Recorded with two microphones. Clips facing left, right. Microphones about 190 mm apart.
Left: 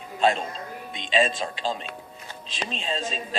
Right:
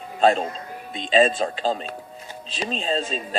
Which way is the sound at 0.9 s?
40° right (ahead or behind).